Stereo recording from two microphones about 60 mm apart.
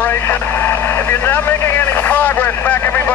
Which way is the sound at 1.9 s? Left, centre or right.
Left.